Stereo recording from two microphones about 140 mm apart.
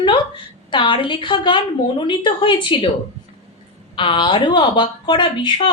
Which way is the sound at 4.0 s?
35° left (ahead or behind).